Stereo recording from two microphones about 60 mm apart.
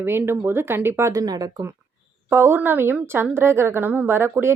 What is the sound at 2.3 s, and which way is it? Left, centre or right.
A woman's voice, right.